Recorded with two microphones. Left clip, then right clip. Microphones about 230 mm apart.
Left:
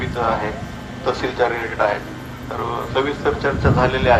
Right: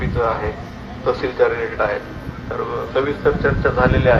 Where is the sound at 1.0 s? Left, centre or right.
Left.